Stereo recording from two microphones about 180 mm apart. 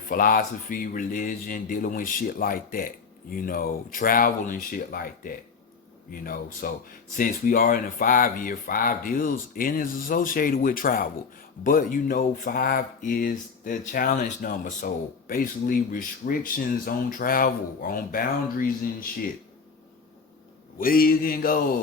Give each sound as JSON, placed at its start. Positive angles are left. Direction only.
{"t": 0.1, "sound": "speech", "side_deg": 55}
{"t": 20.7, "sound": "speech", "side_deg": 55}